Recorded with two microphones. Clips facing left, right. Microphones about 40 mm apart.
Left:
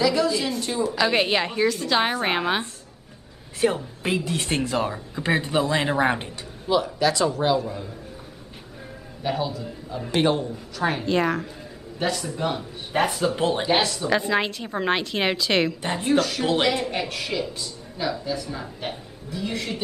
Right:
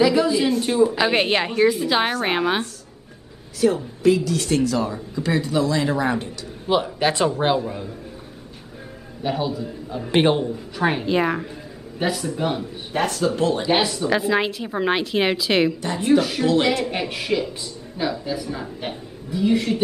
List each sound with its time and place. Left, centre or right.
0.0 s a sound: centre
0.5 s a woman's voice: centre
3.6 s speech: left
6.7 s speech: right
7.6 s speech: centre
9.2 s speech: centre
10.1 s a woman's voice: right; by 12.6 s centre
12.9 s speech: centre
13.4 s speech: left
13.7 s a woman's voice: centre